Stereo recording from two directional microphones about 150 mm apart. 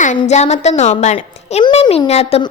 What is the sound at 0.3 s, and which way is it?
A woman's voice, 50° left (ahead or behind).